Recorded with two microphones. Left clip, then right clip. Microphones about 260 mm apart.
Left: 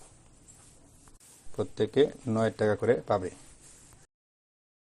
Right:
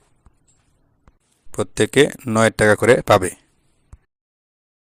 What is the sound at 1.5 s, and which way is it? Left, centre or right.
Speech, right.